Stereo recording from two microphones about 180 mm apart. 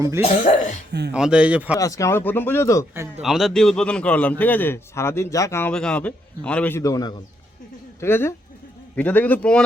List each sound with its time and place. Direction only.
0.2 s speech: 40° left (ahead or behind)
1.1 s a man's voice: 5° right (ahead or behind)
1.8 s a man's voice: 20° left (ahead or behind)
3.2 s a man's voice: centre (ahead or behind)